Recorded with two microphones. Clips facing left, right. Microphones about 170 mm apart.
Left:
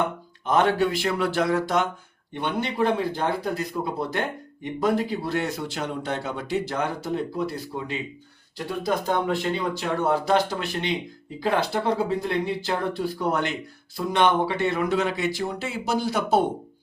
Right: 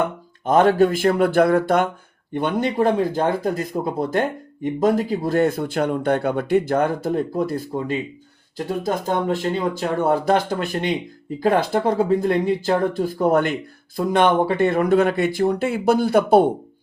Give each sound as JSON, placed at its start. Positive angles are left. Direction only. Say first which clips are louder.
{"t": 0.4, "sound": "speech", "louder": "right 6 dB", "side_deg": -45}